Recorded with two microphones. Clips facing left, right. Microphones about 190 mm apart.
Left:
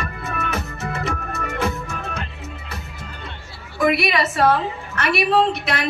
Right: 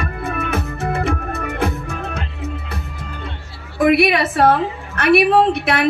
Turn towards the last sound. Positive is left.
turn(degrees=-60)  # may be behind; listen again after turning